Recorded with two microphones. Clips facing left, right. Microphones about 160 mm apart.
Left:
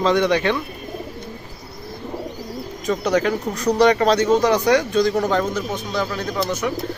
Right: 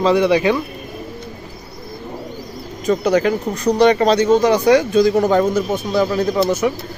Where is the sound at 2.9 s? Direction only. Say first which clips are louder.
Right 4 dB; 5° right (ahead or behind).